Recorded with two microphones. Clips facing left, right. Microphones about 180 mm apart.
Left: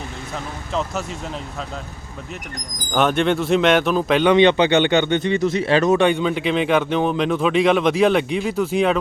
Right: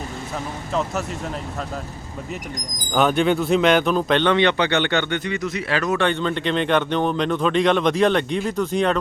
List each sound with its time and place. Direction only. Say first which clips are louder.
0.7 s speech: even; centre (ahead or behind)
2.9 s a man's voice: even; centre (ahead or behind); by 6.1 s 25° left (ahead or behind)
6.1 s speech: left 3 dB; 10° left (ahead or behind)